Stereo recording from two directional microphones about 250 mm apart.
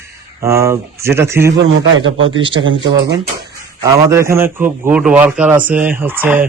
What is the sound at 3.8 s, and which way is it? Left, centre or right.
Speech, centre.